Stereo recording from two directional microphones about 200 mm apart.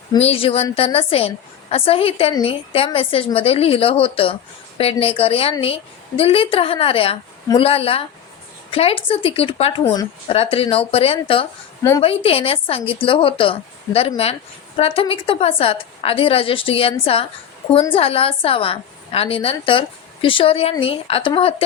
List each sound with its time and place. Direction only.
0.2 s a woman's voice: 30° left (ahead or behind)
11.8 s a woman's voice: 15° left (ahead or behind)
12.0 s a woman's voice: 30° left (ahead or behind)
17.9 s a woman's voice: 30° left (ahead or behind)